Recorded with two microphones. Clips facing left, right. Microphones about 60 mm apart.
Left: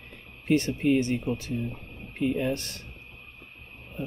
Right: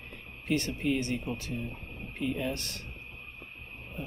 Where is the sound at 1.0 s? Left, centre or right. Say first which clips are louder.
Left 6 dB; left.